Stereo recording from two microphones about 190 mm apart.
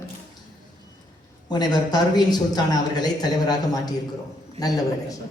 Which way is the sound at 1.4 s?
20° left (ahead or behind).